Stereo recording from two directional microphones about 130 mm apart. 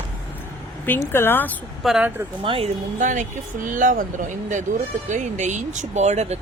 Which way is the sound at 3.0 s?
80° right.